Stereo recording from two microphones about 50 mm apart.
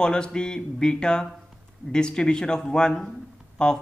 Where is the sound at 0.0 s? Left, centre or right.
Centre.